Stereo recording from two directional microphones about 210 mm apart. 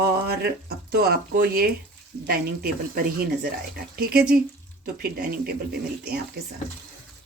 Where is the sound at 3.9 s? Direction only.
45° right (ahead or behind).